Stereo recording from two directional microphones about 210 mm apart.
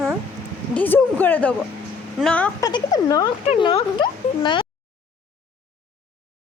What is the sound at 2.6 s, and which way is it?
A woman's voice, 20° left (ahead or behind).